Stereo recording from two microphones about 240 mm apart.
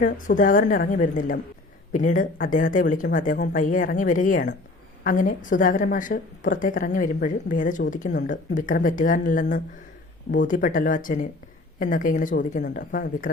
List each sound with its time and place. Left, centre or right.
0.0 s a woman's voice: left